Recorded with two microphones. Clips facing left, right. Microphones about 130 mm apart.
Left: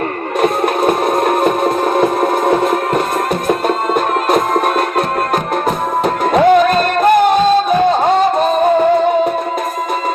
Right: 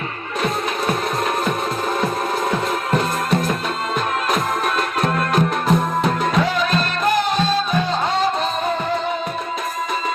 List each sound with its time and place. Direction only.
0.4 s music: 55° left (ahead or behind)
3.9 s music: 50° left (ahead or behind)